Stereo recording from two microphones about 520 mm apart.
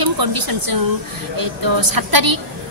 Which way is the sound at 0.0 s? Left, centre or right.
Right.